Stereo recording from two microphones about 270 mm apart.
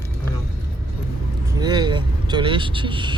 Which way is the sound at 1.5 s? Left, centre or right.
Centre.